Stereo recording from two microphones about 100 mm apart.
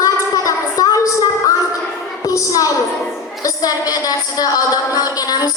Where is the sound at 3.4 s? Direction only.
40° left (ahead or behind).